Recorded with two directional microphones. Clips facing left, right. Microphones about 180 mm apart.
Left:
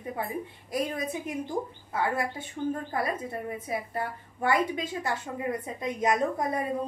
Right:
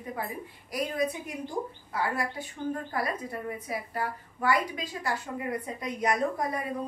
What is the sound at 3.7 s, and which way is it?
A woman's voice, 25° left (ahead or behind).